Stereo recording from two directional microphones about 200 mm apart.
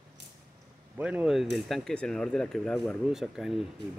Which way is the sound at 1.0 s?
5° right (ahead or behind).